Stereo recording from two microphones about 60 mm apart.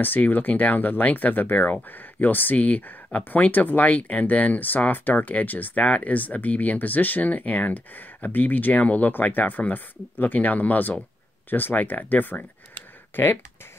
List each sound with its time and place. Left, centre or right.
0.0 s speech: left